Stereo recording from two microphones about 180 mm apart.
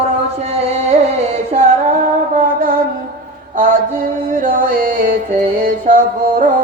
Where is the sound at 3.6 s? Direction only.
50° right (ahead or behind).